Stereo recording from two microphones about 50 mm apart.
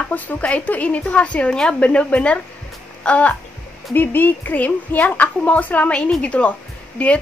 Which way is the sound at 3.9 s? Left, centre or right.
Left.